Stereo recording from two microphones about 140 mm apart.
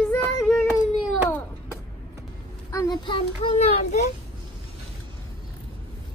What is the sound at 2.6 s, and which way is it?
A child's voice, 30° left (ahead or behind).